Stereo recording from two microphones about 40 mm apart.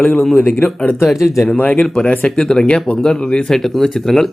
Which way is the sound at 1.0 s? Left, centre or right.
Centre.